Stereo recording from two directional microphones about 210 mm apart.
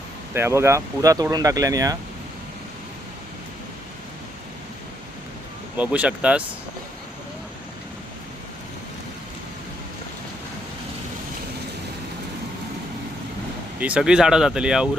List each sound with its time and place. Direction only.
0.3 s speech: 10° right (ahead or behind)
5.7 s speech: 5° right (ahead or behind)
13.7 s speech: 5° right (ahead or behind)